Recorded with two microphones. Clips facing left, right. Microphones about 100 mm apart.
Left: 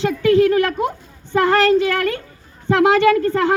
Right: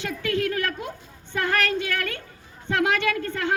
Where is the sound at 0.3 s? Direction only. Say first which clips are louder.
Left 12 dB; 35° left (ahead or behind).